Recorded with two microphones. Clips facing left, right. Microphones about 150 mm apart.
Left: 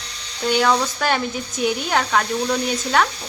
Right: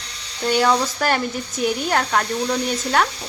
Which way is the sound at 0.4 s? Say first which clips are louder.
Even; centre (ahead or behind).